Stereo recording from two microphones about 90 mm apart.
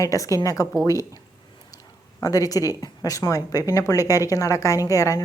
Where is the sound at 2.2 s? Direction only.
40° left (ahead or behind).